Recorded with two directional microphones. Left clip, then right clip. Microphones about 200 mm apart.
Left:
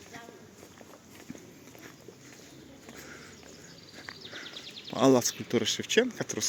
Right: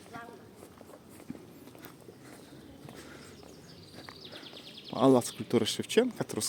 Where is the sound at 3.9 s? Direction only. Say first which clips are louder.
Left 4 dB; centre (ahead or behind).